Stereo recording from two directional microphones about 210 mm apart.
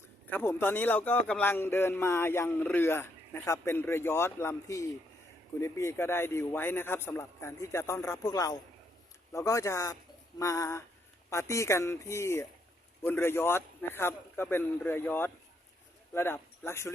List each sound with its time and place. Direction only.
0.3 s a man's voice: 10° left (ahead or behind)